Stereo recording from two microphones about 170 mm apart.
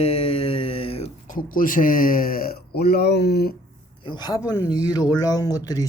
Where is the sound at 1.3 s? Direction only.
55° left (ahead or behind); by 3.5 s 70° left (ahead or behind).